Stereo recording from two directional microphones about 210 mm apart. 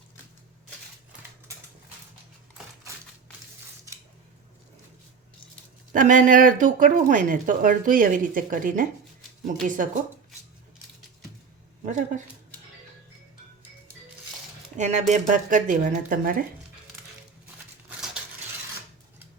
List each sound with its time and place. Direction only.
5.9 s speech: 40° right (ahead or behind)
11.9 s speech: 35° right (ahead or behind)
14.8 s speech: 35° right (ahead or behind)